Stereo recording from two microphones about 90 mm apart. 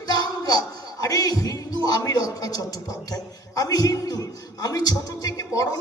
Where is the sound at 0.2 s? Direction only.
45° left (ahead or behind).